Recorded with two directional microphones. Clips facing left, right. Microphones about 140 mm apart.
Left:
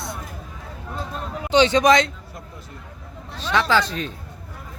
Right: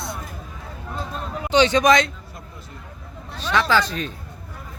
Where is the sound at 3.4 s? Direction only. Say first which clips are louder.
Even; 25° left (ahead or behind).